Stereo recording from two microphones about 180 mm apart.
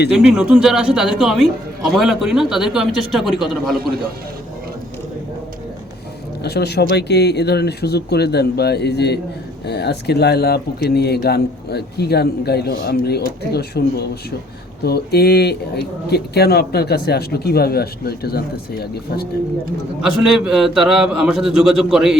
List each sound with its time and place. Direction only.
0.1 s a man's voice: 5° right (ahead or behind)
6.4 s a man's voice: 65° left (ahead or behind)
20.0 s a man's voice: 5° right (ahead or behind)